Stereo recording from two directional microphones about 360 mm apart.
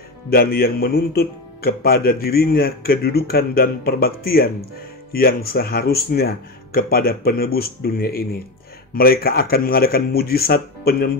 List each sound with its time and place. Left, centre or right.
0.3 s speech: left